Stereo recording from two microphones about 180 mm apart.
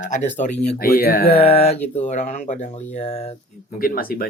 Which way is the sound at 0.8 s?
55° left (ahead or behind).